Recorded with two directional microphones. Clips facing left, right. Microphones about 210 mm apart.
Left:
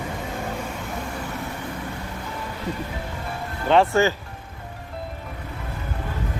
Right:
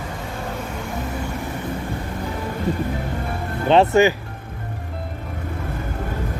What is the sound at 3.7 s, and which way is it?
Speech, 20° right (ahead or behind).